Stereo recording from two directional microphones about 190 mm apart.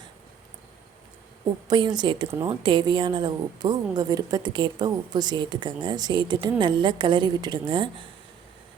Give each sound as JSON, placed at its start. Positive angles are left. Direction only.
{"t": 1.6, "sound": "speech", "side_deg": -25}